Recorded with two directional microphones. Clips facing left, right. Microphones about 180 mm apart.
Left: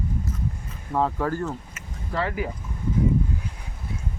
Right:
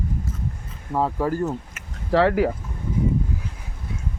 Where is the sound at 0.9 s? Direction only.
10° right (ahead or behind).